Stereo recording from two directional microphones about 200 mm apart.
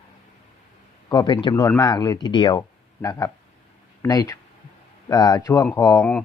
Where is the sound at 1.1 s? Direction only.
20° left (ahead or behind).